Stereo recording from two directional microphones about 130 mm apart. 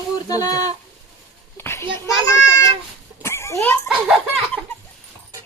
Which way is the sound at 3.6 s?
15° left (ahead or behind).